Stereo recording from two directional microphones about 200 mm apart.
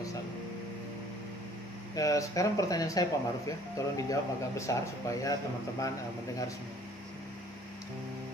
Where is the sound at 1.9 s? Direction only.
15° left (ahead or behind).